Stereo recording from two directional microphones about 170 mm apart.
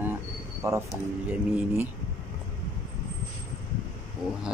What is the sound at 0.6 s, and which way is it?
Speech, 15° right (ahead or behind).